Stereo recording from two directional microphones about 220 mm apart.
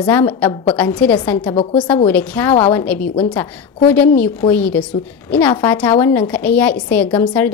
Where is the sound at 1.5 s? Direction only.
25° left (ahead or behind).